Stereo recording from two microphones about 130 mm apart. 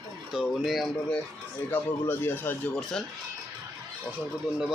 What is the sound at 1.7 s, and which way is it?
Speech, 15° left (ahead or behind).